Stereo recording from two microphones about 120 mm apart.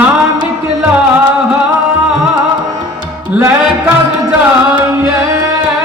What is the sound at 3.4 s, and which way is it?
Music, 15° right (ahead or behind).